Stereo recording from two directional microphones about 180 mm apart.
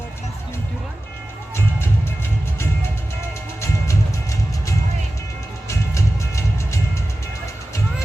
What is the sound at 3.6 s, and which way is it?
Music, 15° left (ahead or behind).